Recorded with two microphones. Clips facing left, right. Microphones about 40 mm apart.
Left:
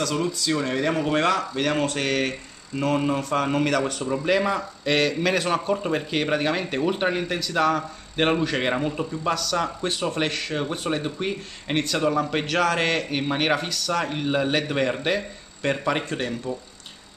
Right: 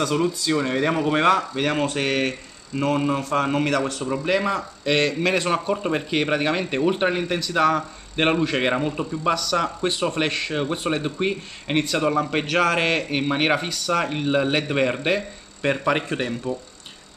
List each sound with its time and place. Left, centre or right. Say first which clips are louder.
0.0 s speech: right 3 dB; centre